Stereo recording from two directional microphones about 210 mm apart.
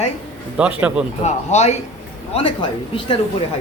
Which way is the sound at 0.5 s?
5° right (ahead or behind).